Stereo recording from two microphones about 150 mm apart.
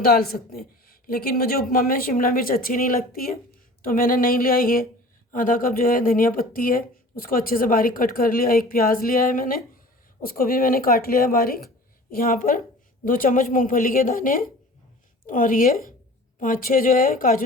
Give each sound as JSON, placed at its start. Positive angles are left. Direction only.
{"t": 0.0, "sound": "a woman's voice", "side_deg": 90}
{"t": 1.0, "sound": "speech", "side_deg": 80}